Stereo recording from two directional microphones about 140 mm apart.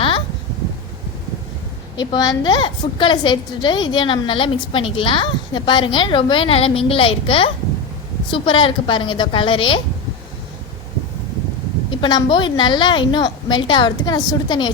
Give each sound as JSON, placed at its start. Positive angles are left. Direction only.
{"t": 2.0, "sound": "a woman's voice", "side_deg": 30}
{"t": 11.9, "sound": "a woman's voice", "side_deg": 35}